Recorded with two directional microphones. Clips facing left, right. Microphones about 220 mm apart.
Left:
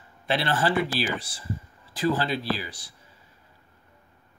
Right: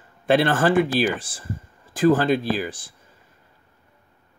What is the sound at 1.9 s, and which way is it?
Speech, 50° right (ahead or behind).